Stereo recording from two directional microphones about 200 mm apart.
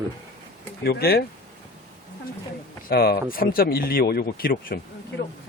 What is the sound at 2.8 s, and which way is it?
Speech, 50° left (ahead or behind).